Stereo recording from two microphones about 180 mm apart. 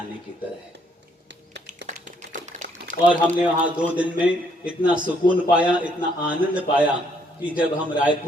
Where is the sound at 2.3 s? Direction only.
45° right (ahead or behind).